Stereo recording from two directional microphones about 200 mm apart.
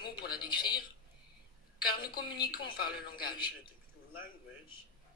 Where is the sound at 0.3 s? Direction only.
20° left (ahead or behind).